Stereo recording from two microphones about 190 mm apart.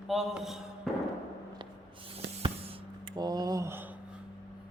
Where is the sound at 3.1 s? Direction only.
20° right (ahead or behind).